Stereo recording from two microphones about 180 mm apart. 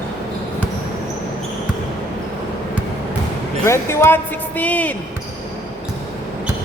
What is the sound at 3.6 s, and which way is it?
Speech, 15° left (ahead or behind).